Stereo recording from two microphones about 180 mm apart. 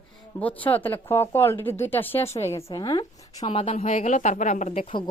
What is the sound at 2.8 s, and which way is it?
A woman's voice, 25° left (ahead or behind).